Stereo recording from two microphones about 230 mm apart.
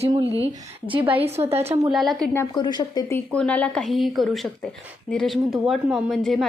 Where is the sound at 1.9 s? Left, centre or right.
Centre.